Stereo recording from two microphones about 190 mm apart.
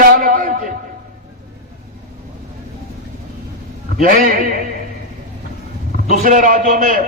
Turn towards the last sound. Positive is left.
turn(degrees=-45)  # may be behind; listen again after turning